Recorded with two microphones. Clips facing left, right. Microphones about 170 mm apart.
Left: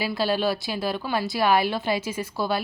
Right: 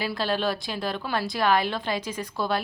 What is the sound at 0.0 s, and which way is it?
A woman's voice, 5° left (ahead or behind).